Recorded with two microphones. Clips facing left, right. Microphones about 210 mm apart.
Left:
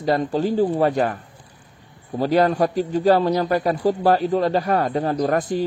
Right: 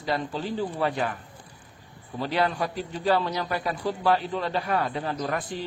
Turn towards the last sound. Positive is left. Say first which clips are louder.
# left 9 dB
turn(degrees=40)  # may be behind; listen again after turning